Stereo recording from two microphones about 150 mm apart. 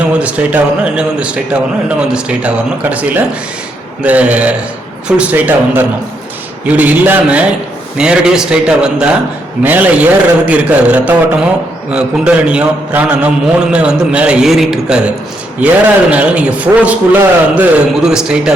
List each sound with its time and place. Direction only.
0.1 s a man's voice: 10° right (ahead or behind)